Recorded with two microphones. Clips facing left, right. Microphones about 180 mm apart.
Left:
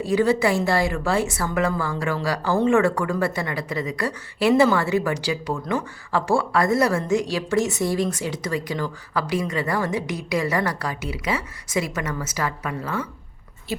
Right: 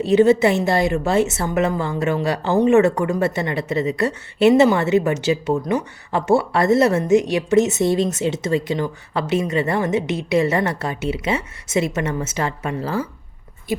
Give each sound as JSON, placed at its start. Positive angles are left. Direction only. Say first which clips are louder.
{"t": 0.0, "sound": "a woman's voice", "louder": "right 6 dB", "side_deg": -25}